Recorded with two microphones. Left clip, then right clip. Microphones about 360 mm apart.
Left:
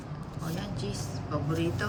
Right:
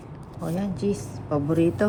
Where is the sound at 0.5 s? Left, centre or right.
Centre.